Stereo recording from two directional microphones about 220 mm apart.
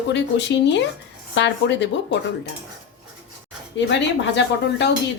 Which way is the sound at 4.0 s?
50° left (ahead or behind).